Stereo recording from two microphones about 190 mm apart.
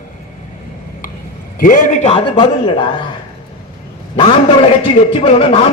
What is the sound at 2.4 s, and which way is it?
Speech, 25° left (ahead or behind).